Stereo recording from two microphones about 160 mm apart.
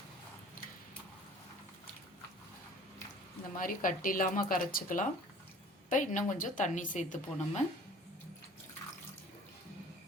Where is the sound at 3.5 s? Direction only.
60° left (ahead or behind).